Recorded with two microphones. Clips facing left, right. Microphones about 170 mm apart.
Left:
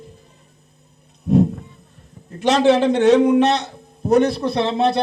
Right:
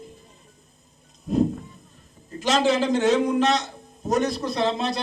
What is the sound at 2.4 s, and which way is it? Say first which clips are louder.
Speech: left 6 dB; 60° left (ahead or behind).